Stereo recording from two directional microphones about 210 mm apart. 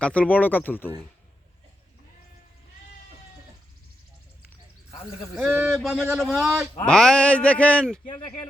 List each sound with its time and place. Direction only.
0.0 s speech: 5° left (ahead or behind)
5.4 s speech: 5° right (ahead or behind)
8.0 s speech: 20° left (ahead or behind)